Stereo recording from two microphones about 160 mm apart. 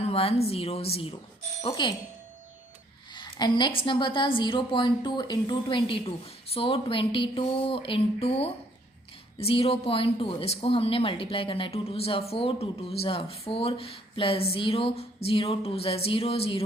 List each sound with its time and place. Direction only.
0.0 s speech: 40° left (ahead or behind)
3.2 s speech: 30° left (ahead or behind)